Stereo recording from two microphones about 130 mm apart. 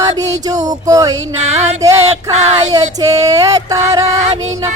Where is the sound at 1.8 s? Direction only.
25° right (ahead or behind).